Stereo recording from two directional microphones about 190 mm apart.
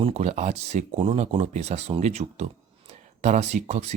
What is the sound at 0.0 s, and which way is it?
Speech, 35° right (ahead or behind).